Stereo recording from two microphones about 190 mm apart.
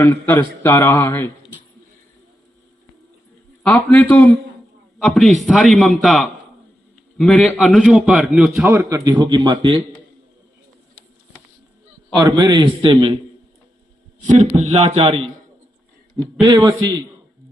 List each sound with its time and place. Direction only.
0.0 s speech: 10° left (ahead or behind)
3.6 s a man's voice: 10° left (ahead or behind); by 9.0 s 10° right (ahead or behind)
9.0 s a man's voice: 25° right (ahead or behind)
12.1 s a man's voice: 20° right (ahead or behind)
14.2 s a man's voice: 40° right (ahead or behind)
16.4 s a man's voice: 25° right (ahead or behind)